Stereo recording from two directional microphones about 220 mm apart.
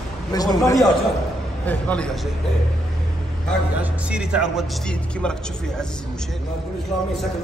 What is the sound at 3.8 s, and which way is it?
Speech, 5° right (ahead or behind).